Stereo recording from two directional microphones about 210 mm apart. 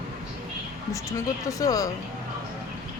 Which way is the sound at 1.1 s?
15° left (ahead or behind).